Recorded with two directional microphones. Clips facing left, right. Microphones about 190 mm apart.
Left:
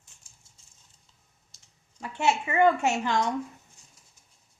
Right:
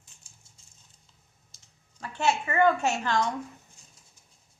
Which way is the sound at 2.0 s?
20° left (ahead or behind).